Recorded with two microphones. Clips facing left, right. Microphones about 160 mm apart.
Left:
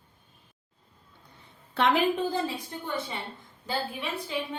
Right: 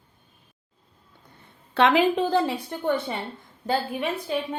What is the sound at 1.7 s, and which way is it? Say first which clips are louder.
A woman's voice: right 5 dB; 90° right.